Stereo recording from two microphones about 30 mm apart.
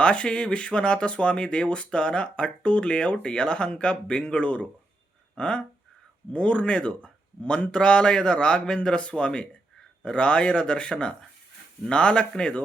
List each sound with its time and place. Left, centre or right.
0.0 s speech: left
5.4 s speech: left